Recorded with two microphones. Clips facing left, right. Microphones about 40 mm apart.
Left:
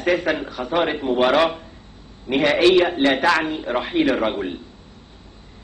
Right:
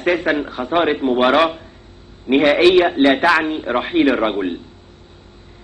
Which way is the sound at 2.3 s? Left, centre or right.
Right.